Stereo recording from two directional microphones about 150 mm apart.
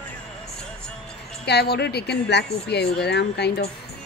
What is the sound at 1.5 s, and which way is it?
Speech, 90° left.